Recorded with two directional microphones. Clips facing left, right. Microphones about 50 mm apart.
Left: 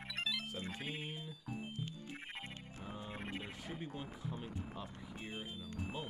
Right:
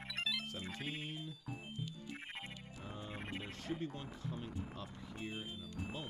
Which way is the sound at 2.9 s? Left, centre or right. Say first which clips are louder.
Left 1 dB; centre.